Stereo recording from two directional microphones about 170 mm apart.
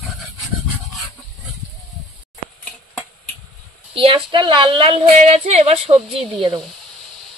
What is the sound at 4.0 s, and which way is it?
A woman's voice, 30° right (ahead or behind).